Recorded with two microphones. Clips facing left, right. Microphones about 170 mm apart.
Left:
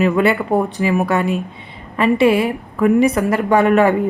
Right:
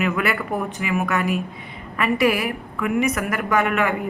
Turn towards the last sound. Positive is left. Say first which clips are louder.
# left 8 dB
turn(degrees=35)  # may be behind; listen again after turning